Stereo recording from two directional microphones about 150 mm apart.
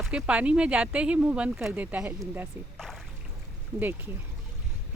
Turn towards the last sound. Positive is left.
turn(degrees=-15)  # may be behind; listen again after turning